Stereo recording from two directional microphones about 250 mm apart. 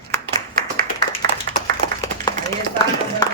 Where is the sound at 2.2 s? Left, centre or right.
Centre.